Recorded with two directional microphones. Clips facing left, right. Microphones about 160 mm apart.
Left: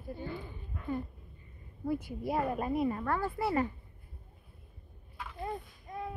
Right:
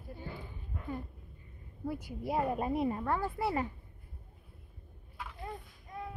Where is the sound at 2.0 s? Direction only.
15° right (ahead or behind).